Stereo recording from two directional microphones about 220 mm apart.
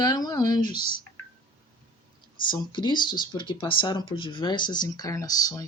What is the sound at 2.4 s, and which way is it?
Speech, 20° left (ahead or behind).